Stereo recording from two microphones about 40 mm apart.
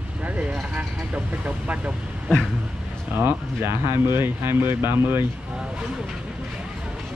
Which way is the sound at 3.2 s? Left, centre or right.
Right.